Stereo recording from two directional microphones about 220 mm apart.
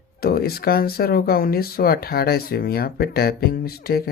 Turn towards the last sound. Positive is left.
turn(degrees=45)  # may be behind; listen again after turning